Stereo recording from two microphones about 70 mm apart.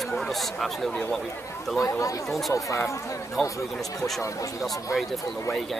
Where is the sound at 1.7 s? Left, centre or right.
Left.